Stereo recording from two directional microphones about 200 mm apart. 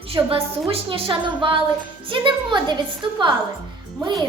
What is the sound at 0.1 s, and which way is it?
A child's voice, 30° right (ahead or behind).